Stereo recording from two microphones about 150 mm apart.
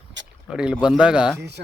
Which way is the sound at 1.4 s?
90° right.